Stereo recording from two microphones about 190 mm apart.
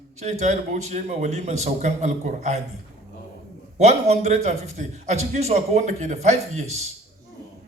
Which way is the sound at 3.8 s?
35° right (ahead or behind).